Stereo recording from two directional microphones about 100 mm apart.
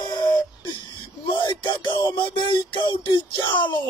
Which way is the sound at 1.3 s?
50° left (ahead or behind).